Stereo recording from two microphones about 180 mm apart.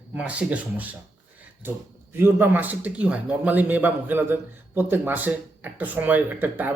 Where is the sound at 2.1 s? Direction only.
10° right (ahead or behind).